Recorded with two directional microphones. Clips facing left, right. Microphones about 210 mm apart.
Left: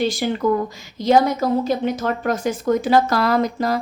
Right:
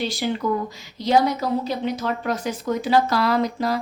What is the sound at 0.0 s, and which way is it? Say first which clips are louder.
A woman's voice: left 4 dB; 50° left (ahead or behind).